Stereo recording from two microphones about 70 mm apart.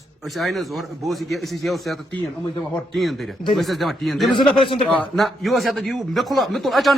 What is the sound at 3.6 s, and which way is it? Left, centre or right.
Speech, centre.